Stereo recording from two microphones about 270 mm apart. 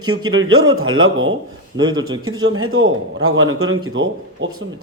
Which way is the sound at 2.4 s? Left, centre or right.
Right.